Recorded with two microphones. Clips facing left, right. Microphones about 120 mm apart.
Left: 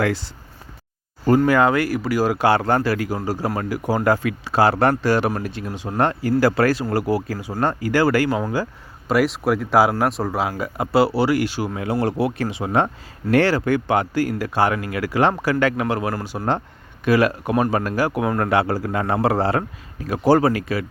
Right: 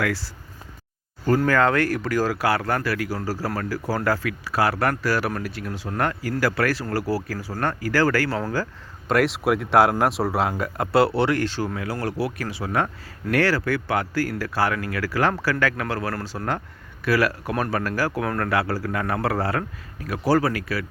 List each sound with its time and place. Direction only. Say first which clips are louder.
0.0 s speech: left 4 dB; 25° left (ahead or behind)
1.5 s speech: left 3 dB; 15° left (ahead or behind)
2.3 s speech: left 5 dB; 25° left (ahead or behind)
9.0 s speech: left 2 dB; centre (ahead or behind)
11.8 s speech: left 9 dB; 25° left (ahead or behind)